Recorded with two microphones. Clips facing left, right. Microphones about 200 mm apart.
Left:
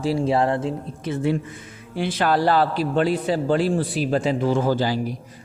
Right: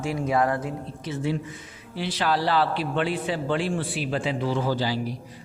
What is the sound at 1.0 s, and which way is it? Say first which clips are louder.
A woman's voice: left 5 dB; 55° left (ahead or behind).